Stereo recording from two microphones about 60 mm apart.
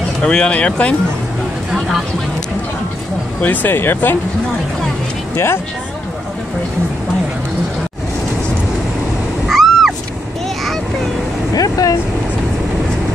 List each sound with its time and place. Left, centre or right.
0.2 s speech: centre
3.3 s speech: left
5.3 s speech: left
9.5 s owl: centre
11.5 s vehicle: left